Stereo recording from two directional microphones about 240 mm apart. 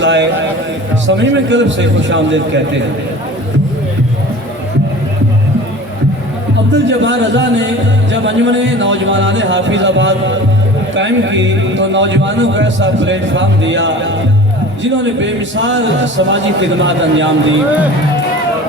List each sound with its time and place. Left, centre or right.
0.0 s speech: right
6.7 s speech: right